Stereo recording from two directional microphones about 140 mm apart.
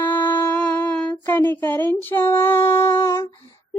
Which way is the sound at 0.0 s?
15° left (ahead or behind).